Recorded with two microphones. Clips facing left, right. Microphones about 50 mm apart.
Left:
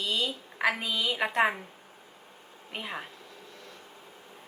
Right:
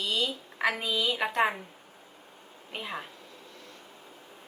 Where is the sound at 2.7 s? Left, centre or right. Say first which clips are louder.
Even; centre.